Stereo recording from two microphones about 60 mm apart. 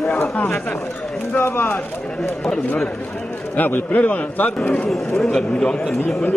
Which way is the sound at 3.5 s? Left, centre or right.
Left.